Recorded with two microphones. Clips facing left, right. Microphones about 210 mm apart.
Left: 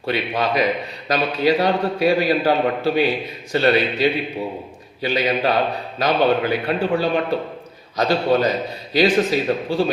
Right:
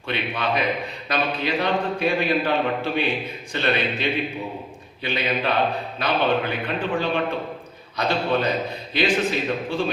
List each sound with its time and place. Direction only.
0.0 s a man's voice: 40° left (ahead or behind)